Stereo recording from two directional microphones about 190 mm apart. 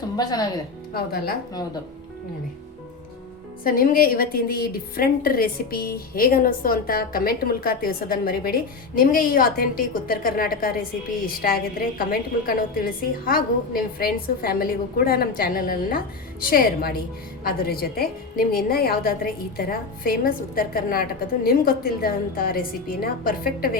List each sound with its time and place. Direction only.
0.2 s speech: 20° left (ahead or behind)
0.9 s a woman's voice: 55° left (ahead or behind)
3.6 s a woman's voice: 50° left (ahead or behind)